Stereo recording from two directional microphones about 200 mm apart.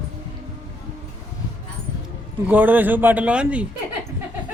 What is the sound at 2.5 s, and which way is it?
Speech, 10° right (ahead or behind).